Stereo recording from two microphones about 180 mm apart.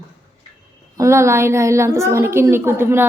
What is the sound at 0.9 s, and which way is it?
A woman's voice, 15° right (ahead or behind).